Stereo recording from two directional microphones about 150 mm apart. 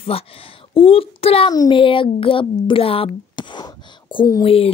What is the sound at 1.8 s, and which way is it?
Speech, 35° left (ahead or behind).